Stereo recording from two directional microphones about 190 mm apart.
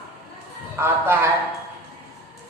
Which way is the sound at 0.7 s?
10° right (ahead or behind).